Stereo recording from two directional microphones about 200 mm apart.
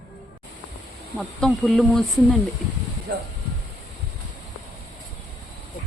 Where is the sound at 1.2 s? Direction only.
Centre (ahead or behind).